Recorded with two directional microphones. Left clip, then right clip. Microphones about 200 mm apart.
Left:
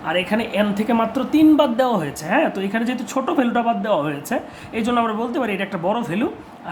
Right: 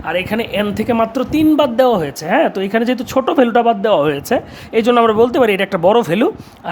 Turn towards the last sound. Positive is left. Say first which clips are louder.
# right 10 dB
turn(degrees=-55)  # may be behind; listen again after turning